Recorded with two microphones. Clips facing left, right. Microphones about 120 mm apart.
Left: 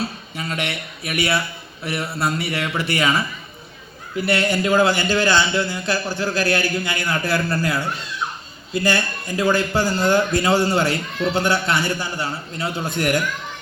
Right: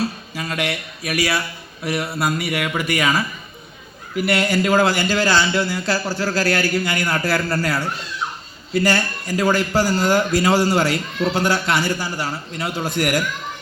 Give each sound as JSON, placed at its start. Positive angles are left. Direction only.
{"t": 0.0, "sound": "a man's voice", "side_deg": 25}
{"t": 4.4, "sound": "a man's voice", "side_deg": 25}